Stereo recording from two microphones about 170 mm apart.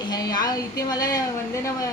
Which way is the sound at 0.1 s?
25° left (ahead or behind).